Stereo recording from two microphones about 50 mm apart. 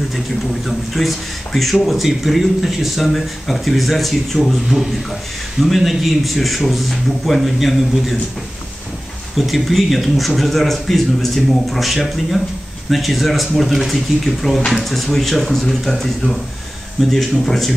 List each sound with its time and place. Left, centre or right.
0.7 s speech: centre
5.6 s speech: centre
9.4 s speech: centre